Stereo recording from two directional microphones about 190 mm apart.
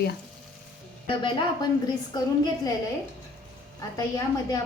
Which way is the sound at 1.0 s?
25° left (ahead or behind).